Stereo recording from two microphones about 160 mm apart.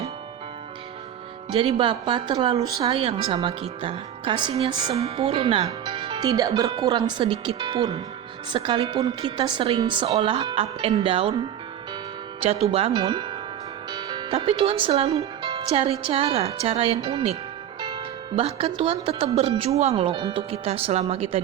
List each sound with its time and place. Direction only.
1.5 s speech: 35° right (ahead or behind)
5.6 s music: 30° right (ahead or behind)
6.7 s speech: 25° right (ahead or behind)
12.4 s speech: 40° right (ahead or behind)
15.1 s speech: 25° right (ahead or behind)
17.7 s music: 30° right (ahead or behind)
19.0 s speech: 35° right (ahead or behind)